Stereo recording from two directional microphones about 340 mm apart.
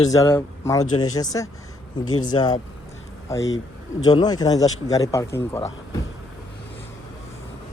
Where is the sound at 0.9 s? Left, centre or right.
Left.